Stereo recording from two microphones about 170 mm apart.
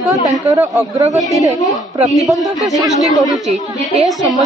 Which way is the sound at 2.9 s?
20° left (ahead or behind).